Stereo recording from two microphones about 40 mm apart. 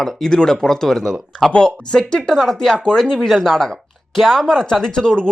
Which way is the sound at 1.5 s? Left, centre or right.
Left.